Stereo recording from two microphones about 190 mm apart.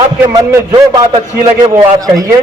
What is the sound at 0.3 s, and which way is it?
Speech, 20° right (ahead or behind).